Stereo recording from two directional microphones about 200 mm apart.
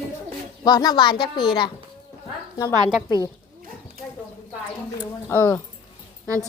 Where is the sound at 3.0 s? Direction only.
20° left (ahead or behind).